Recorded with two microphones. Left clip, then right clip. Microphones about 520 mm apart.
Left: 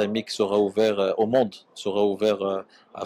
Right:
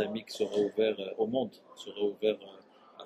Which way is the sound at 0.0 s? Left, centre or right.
Left.